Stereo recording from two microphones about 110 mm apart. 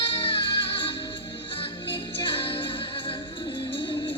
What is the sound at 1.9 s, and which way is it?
Music, 50° left (ahead or behind).